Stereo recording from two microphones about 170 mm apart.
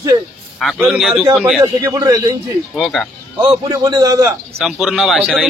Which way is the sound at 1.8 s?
20° right (ahead or behind).